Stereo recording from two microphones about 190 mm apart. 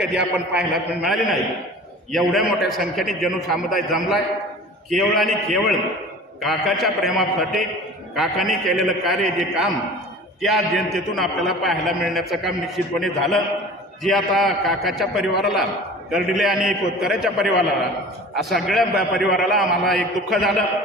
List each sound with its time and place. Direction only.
0.0 s a man's voice: centre (ahead or behind)